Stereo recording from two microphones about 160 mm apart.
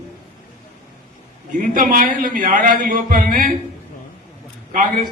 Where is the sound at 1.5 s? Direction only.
60° right (ahead or behind).